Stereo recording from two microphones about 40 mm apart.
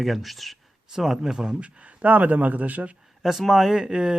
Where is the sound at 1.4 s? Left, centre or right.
Right.